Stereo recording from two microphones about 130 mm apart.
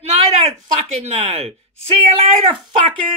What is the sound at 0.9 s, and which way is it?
Speech, 55° right (ahead or behind).